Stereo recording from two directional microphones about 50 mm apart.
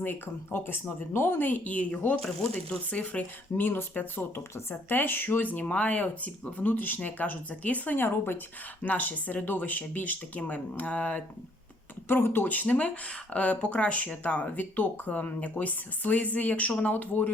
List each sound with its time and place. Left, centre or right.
0.0 s speech: left
1.4 s speech: left
3.7 s speech: left
7.9 s speech: left
12.0 s speech: left